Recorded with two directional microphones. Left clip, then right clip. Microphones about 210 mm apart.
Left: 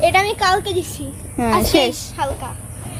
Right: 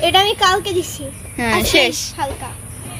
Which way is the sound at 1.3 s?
30° left (ahead or behind).